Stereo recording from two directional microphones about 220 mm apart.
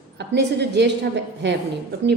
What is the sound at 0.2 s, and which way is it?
Speech, 50° right (ahead or behind).